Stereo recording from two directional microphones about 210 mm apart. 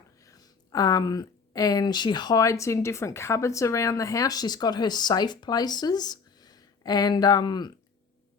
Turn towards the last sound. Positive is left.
turn(degrees=20)  # may be behind; listen again after turning